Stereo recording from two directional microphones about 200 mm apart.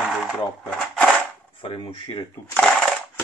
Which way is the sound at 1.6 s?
25° left (ahead or behind).